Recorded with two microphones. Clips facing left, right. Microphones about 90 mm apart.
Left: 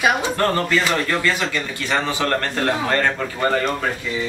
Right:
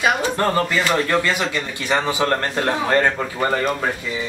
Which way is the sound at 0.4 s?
10° right (ahead or behind).